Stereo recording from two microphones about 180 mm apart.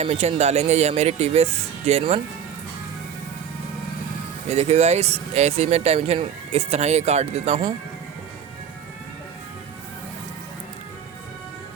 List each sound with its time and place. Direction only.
0.0 s speech: 35° right (ahead or behind)
4.4 s speech: 40° right (ahead or behind)